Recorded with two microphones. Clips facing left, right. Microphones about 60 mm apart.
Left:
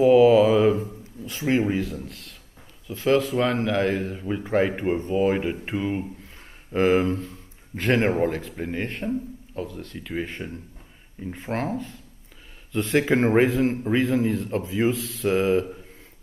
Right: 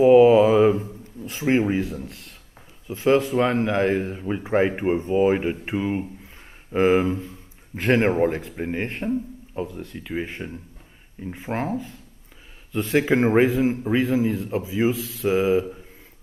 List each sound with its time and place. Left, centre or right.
0.0 s a sound: centre
1.7 s speech: centre
3.6 s a man's voice: centre